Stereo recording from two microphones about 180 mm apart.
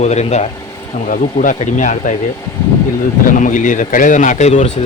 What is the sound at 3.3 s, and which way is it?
Speech, 45° left (ahead or behind).